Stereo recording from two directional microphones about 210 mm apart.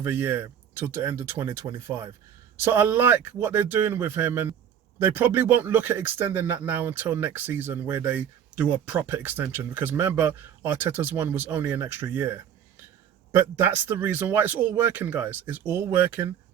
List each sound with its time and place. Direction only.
0.0 s speech: 10° right (ahead or behind)